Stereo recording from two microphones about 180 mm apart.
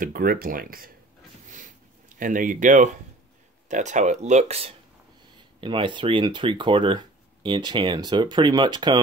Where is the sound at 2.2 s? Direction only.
45° right (ahead or behind).